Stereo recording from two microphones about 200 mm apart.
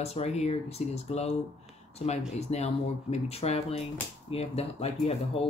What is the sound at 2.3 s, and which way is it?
Speech, 30° left (ahead or behind).